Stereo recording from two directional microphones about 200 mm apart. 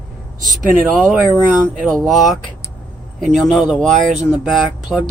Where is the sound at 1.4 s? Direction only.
10° right (ahead or behind).